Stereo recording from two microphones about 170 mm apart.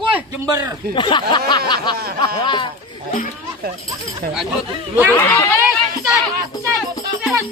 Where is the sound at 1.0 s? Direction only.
30° left (ahead or behind).